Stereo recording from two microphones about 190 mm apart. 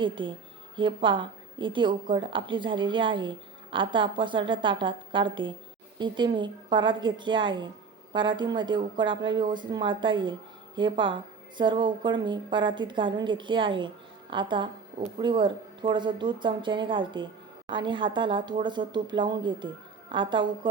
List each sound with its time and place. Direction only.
0.0 s a woman's voice: 25° right (ahead or behind)